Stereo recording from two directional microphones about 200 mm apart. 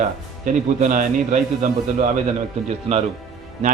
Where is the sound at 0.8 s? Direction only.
40° right (ahead or behind).